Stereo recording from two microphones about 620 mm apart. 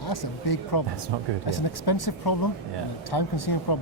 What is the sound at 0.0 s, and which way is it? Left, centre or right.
Speech, left.